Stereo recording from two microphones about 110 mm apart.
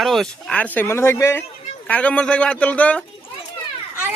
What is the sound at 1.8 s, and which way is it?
Speech, 10° left (ahead or behind).